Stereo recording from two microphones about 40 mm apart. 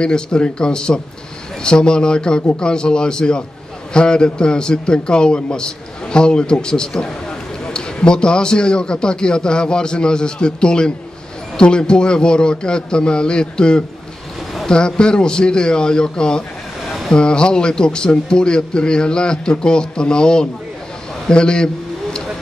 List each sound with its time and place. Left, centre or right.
0.0 s a man's voice: left